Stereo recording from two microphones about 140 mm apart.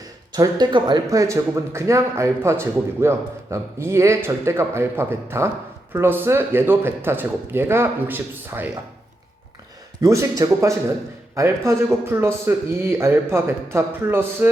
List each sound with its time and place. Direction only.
0.0 s speech: 30° right (ahead or behind)
10.0 s speech: 25° right (ahead or behind)